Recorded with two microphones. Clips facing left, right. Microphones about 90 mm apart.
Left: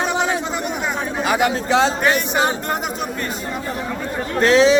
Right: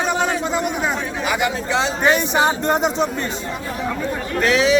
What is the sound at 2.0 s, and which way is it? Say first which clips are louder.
Speech: right 2 dB; 20° right (ahead or behind).